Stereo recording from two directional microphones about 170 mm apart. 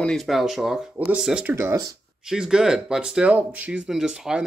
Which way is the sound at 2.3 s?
5° right (ahead or behind).